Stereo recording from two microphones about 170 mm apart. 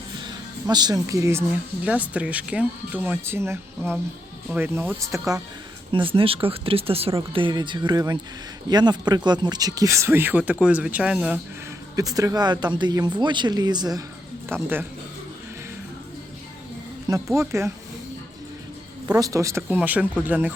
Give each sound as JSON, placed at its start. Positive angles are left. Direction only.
{"t": 0.7, "sound": "speech", "side_deg": -25}
{"t": 5.9, "sound": "speech", "side_deg": -30}
{"t": 11.9, "sound": "speech", "side_deg": -20}
{"t": 14.5, "sound": "speech", "side_deg": -10}
{"t": 17.3, "sound": "speech", "side_deg": -15}
{"t": 19.0, "sound": "speech", "side_deg": -20}